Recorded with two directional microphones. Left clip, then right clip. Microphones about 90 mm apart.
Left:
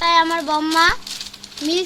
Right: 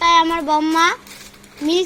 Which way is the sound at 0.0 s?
25° right (ahead or behind).